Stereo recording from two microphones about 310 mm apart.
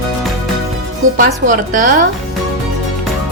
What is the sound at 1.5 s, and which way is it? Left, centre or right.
Speech, right.